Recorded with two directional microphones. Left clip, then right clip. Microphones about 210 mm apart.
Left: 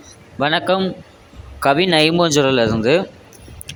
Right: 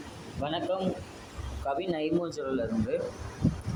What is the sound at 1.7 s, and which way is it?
Speech, 75° left (ahead or behind).